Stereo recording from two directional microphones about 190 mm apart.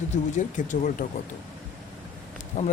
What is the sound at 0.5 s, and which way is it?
Speech, 40° left (ahead or behind).